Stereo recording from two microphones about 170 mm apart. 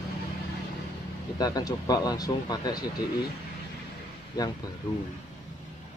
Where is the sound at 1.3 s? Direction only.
20° left (ahead or behind).